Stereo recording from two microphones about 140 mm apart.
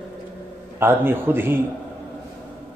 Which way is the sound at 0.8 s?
15° right (ahead or behind).